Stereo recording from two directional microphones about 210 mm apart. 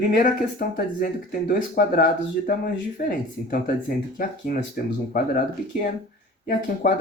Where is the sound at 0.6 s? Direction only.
45° left (ahead or behind).